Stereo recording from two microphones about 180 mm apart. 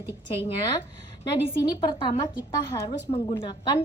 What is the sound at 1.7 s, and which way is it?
A woman's voice, 25° left (ahead or behind).